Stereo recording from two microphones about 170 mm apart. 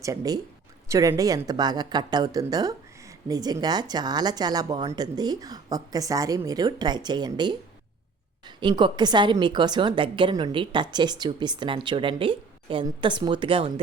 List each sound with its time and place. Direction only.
0.0 s a woman's voice: 20° right (ahead or behind)